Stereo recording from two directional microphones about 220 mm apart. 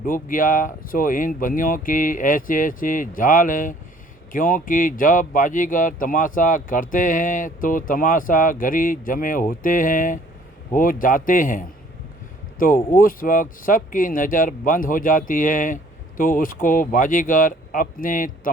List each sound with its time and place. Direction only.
0.0 s speech: 40° left (ahead or behind)